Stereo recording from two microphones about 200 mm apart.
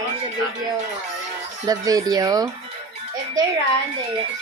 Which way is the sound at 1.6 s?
20° right (ahead or behind).